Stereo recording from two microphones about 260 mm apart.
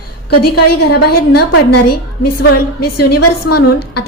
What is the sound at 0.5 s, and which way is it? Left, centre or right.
Speech, left.